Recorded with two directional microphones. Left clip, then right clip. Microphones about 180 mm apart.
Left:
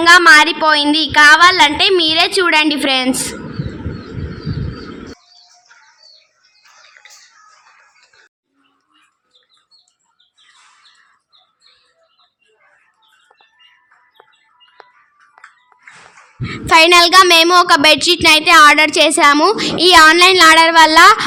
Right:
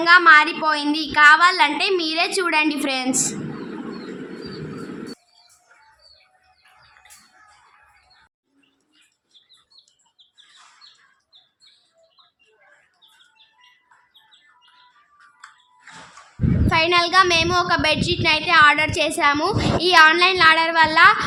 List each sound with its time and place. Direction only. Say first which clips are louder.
0.0 s a woman's voice: left 6 dB; 30° left (ahead or behind)
16.6 s speech: left 10 dB; 40° left (ahead or behind)